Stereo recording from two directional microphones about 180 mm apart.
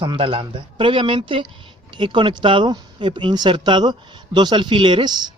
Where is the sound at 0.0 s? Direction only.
30° right (ahead or behind).